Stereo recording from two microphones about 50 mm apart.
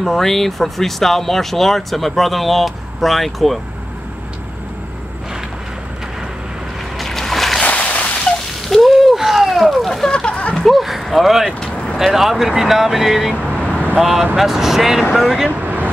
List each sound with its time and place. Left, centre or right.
0.0 s speech: centre
7.0 s boat: centre
7.6 s a sound: left
8.6 s a sound: centre
10.1 s a sound: left
10.5 s a sound: centre
11.6 s vehicle: left
12.0 s speech: centre
13.3 s speech: right
13.7 s vehicle: right
13.9 s speech: centre
15.6 s vehicle: right